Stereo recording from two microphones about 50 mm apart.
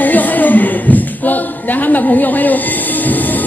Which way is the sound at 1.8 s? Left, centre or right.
Left.